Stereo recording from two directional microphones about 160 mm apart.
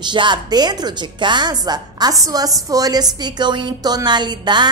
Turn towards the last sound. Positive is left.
turn(degrees=-25)  # may be behind; listen again after turning